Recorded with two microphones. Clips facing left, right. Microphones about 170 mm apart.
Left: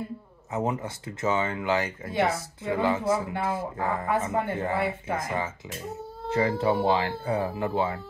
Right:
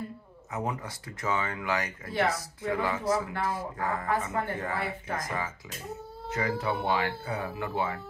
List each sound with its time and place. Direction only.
0.5 s speech: 25° left (ahead or behind)